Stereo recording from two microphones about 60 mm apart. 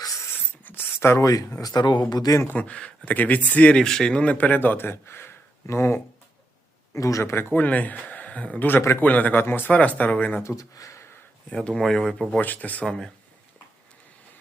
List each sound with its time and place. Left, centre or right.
0.6 s a sound: left
1.2 s speech: left
1.6 s speech: left
2.5 s speech: left
3.8 s speech: centre; by 6.0 s left
6.9 s speech: left
7.5 s speech: left
9.7 s speech: left
10.6 s a sound: left
11.5 s speech: centre
12.4 s speech: left